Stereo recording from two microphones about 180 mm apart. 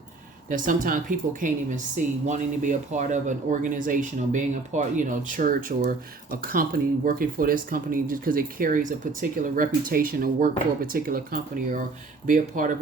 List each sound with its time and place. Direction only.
0.5 s speech: 45° right (ahead or behind)